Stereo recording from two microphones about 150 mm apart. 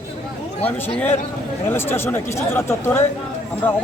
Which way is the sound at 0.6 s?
10° left (ahead or behind).